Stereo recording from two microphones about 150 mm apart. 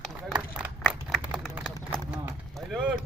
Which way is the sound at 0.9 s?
5° right (ahead or behind).